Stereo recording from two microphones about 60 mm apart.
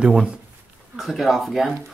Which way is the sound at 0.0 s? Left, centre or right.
Centre.